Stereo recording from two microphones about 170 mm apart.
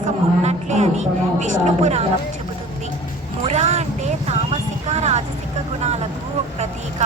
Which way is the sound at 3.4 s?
40° right (ahead or behind).